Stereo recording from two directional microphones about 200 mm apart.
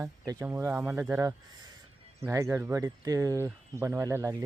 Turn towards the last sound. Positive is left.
turn(degrees=-15)  # may be behind; listen again after turning